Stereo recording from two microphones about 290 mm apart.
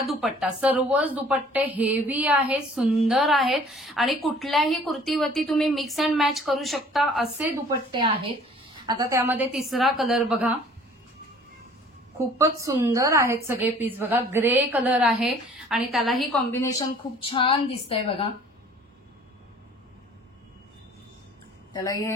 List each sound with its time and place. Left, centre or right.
0.0 s a woman's voice: centre
7.9 s a woman's voice: centre
12.2 s a woman's voice: centre
21.7 s a woman's voice: centre